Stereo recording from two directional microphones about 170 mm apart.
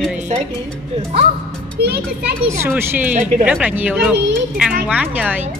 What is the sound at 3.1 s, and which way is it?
Speech, 45° right (ahead or behind).